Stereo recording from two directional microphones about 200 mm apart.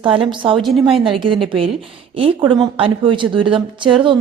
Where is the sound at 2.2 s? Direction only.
25° right (ahead or behind).